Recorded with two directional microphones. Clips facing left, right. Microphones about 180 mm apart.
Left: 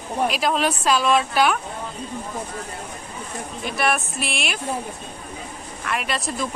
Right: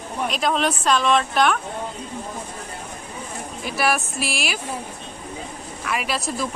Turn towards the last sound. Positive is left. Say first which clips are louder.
# right 1 dB
turn(degrees=0)  # may be behind; listen again after turning